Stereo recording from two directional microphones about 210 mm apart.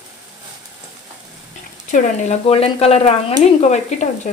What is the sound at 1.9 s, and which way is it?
Speech, 30° left (ahead or behind).